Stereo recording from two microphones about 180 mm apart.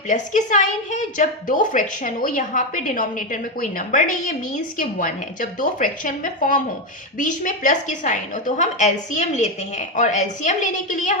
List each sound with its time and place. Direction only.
0.1 s a woman's voice: 45° left (ahead or behind)